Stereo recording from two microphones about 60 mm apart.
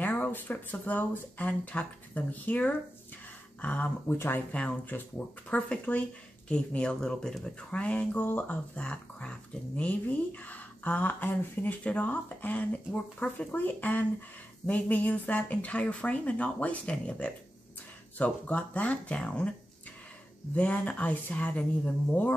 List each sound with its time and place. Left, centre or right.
0.0 s speech: left
4.1 s speech: left
4.5 s speech: left
20.5 s speech: left